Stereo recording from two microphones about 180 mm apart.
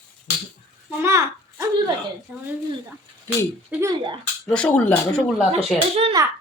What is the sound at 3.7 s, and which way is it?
Speech, 15° right (ahead or behind).